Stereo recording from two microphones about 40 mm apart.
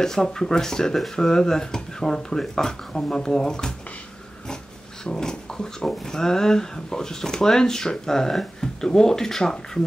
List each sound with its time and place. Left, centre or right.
0.0 s speech: centre
5.0 s speech: centre